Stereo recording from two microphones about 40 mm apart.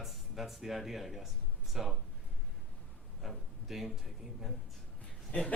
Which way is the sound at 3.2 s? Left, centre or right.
Centre.